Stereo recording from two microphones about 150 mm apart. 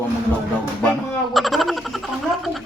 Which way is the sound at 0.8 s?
5° left (ahead or behind).